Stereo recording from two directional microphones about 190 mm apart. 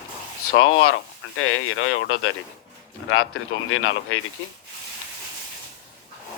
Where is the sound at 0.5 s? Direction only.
90° left.